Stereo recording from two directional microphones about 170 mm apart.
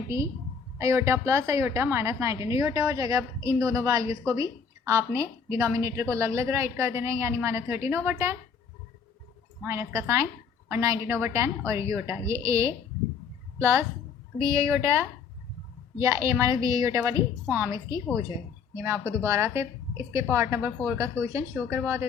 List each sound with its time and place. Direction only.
0.8 s a woman's voice: 15° right (ahead or behind)
9.6 s a woman's voice: 15° right (ahead or behind)
18.7 s a woman's voice: 15° right (ahead or behind)